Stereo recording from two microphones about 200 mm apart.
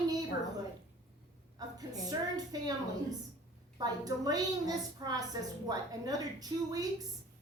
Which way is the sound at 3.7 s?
20° right (ahead or behind).